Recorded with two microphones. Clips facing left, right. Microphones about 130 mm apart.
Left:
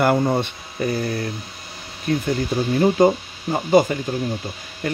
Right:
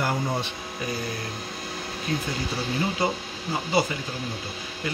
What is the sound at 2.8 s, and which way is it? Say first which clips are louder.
Speech: left 13 dB; 50° left (ahead or behind).